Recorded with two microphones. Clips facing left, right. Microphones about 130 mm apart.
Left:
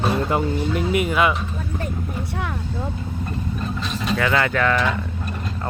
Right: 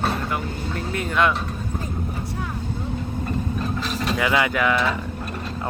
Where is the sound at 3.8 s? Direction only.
Centre (ahead or behind).